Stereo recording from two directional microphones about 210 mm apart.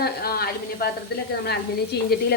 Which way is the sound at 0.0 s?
45° left (ahead or behind).